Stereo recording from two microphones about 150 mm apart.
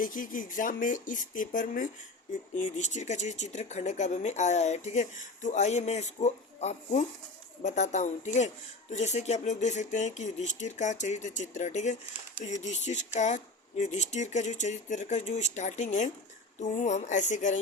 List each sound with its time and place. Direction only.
0.0 s speech: 65° left (ahead or behind)